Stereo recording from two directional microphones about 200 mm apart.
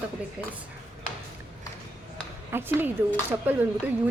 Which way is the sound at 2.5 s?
10° right (ahead or behind).